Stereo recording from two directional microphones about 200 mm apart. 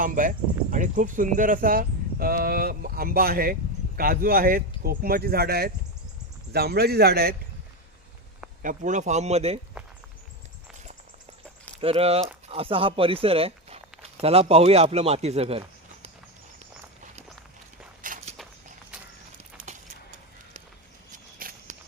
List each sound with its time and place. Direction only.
0.0 s speech: 40° right (ahead or behind)
8.6 s speech: 40° right (ahead or behind)
9.8 s walk: 5° right (ahead or behind)
11.8 s speech: 30° right (ahead or behind)
18.0 s walk: 40° right (ahead or behind)
21.1 s a sound: 40° right (ahead or behind)